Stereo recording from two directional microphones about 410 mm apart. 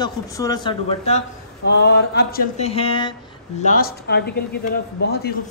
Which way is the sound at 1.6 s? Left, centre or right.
Left.